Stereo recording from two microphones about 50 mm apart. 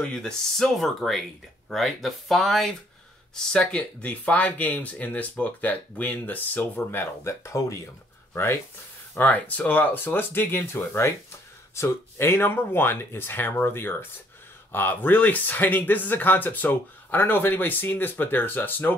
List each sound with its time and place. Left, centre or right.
0.1 s speech: centre
3.5 s speech: left
7.2 s speech: left
9.1 s speech: left